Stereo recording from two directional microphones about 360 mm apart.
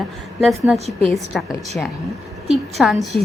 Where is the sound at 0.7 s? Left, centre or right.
Centre.